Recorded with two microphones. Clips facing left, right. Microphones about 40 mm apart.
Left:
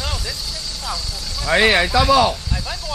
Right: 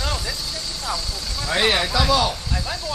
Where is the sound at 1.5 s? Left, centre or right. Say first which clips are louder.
Left 5 dB; left.